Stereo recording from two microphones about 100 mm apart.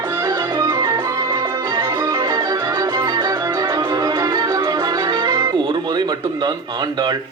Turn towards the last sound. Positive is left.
turn(degrees=-45)  # may be behind; listen again after turning